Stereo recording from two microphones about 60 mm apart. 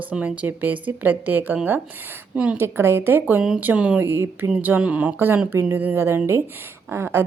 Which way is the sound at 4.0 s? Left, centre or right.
Right.